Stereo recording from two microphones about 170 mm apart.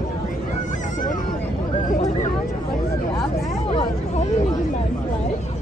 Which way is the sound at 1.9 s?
45° left (ahead or behind).